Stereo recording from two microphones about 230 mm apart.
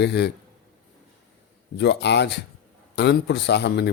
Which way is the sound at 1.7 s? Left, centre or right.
Left.